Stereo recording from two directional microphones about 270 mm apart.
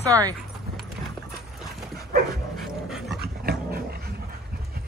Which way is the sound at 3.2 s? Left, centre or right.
Right.